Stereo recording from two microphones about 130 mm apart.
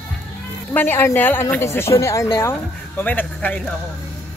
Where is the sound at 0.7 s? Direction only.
15° left (ahead or behind).